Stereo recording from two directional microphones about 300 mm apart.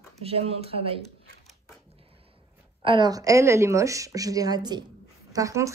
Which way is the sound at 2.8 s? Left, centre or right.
Centre.